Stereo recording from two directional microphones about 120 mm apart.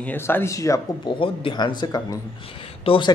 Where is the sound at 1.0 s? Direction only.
45° left (ahead or behind).